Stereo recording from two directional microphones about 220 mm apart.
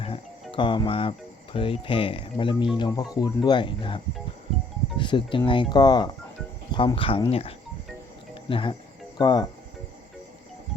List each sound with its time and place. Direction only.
0.5 s speech: 20° left (ahead or behind)